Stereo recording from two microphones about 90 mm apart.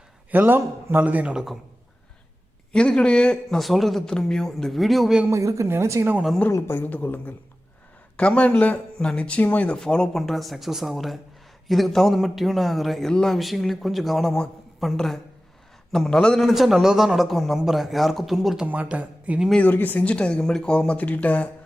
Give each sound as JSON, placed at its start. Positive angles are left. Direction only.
{"t": 0.3, "sound": "a man's voice", "side_deg": -20}
{"t": 2.7, "sound": "speech", "side_deg": 10}
{"t": 5.3, "sound": "a woman's voice", "side_deg": -35}
{"t": 6.5, "sound": "a man's voice", "side_deg": 35}
{"t": 6.7, "sound": "speech", "side_deg": 20}
{"t": 9.7, "sound": "speech", "side_deg": 5}
{"t": 16.4, "sound": "speech", "side_deg": 0}
{"t": 18.6, "sound": "a man's voice", "side_deg": -15}
{"t": 19.6, "sound": "speech", "side_deg": 20}